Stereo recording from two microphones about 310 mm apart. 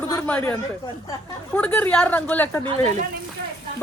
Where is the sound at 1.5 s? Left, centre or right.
Centre.